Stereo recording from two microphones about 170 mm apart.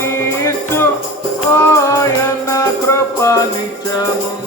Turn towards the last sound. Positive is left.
turn(degrees=15)  # may be behind; listen again after turning